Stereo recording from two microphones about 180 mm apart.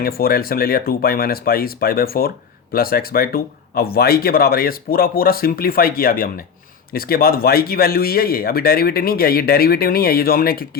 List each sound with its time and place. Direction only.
0.0 s speech: 55° left (ahead or behind)